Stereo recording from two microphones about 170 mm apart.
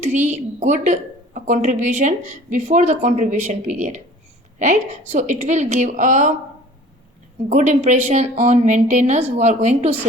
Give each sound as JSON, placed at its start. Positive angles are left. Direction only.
{"t": 0.3, "sound": "a woman's voice", "side_deg": -45}
{"t": 7.5, "sound": "a woman's voice", "side_deg": -45}